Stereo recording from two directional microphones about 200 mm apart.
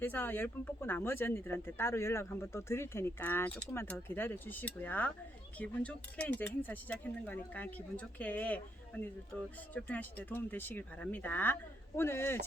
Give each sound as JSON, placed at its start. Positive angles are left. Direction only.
{"t": 0.0, "sound": "speech", "side_deg": 10}